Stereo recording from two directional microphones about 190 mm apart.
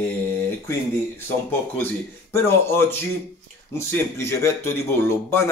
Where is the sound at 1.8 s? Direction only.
10° left (ahead or behind).